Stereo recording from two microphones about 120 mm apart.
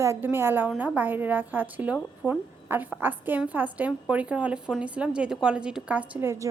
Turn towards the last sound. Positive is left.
turn(degrees=-20)  # may be behind; listen again after turning